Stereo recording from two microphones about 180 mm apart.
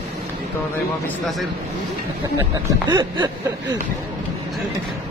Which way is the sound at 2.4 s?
25° right (ahead or behind).